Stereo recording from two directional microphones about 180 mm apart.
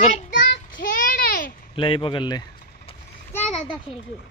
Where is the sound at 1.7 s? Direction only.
30° left (ahead or behind).